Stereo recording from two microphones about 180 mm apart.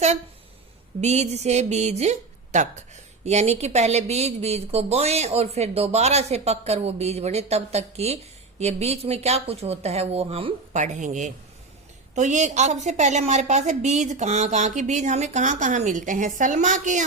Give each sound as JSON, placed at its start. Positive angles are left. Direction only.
{"t": 1.0, "sound": "speech", "side_deg": -40}